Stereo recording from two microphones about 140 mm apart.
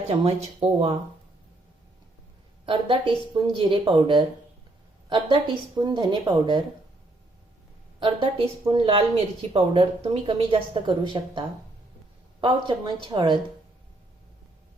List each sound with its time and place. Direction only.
0.1 s a woman's voice: 45° right (ahead or behind)
2.6 s a woman's voice: 40° right (ahead or behind)
7.9 s a woman's voice: 35° right (ahead or behind)